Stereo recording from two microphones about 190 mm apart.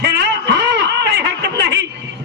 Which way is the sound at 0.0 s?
60° right (ahead or behind).